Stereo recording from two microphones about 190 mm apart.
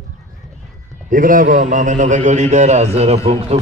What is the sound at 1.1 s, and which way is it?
A man's voice, 45° right (ahead or behind).